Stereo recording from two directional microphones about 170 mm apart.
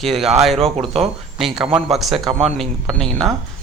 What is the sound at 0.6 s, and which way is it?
Speech, 35° right (ahead or behind).